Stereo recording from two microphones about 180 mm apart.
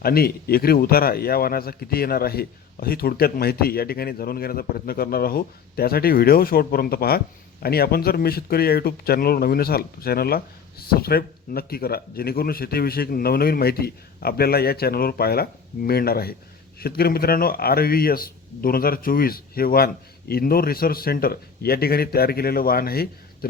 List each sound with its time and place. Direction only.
0.0 s a man's voice: 60° left (ahead or behind)